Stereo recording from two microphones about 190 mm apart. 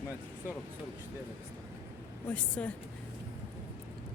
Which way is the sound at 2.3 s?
5° left (ahead or behind).